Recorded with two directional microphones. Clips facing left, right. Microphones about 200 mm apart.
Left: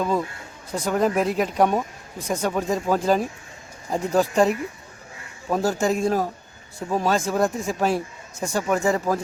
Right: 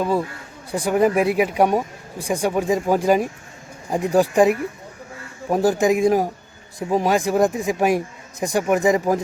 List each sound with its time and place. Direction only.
0.7 s speech: 10° right (ahead or behind)